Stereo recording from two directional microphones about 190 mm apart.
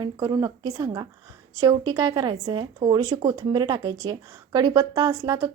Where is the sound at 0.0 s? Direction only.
20° right (ahead or behind).